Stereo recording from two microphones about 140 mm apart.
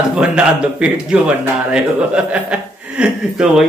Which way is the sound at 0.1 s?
5° right (ahead or behind).